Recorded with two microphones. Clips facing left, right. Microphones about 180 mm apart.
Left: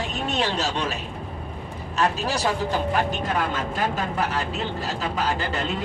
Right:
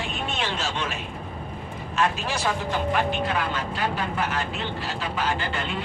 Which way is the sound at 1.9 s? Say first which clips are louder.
Left 2 dB; 40° left (ahead or behind).